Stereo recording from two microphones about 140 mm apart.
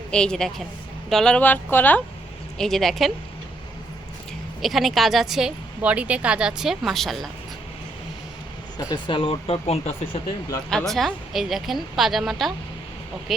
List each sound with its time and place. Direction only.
0.1 s a woman's voice: 5° left (ahead or behind)
4.6 s a woman's voice: centre (ahead or behind)
8.8 s speech: 30° left (ahead or behind)
10.7 s a woman's voice: 5° left (ahead or behind)